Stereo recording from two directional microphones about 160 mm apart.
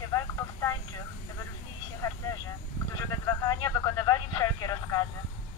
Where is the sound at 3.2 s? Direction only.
25° left (ahead or behind).